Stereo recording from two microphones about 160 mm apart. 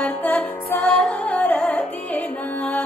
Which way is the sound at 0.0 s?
10° left (ahead or behind).